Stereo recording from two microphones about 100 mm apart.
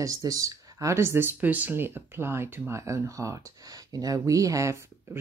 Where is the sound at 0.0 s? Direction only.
35° right (ahead or behind).